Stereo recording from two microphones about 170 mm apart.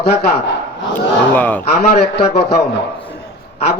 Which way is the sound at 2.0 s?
70° left (ahead or behind).